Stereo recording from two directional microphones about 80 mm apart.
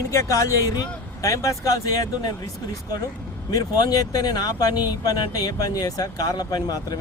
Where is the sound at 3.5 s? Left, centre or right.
Left.